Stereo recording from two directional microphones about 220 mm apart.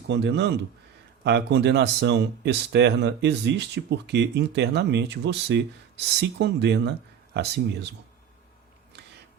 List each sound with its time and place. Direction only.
0.1 s speech: 50° right (ahead or behind)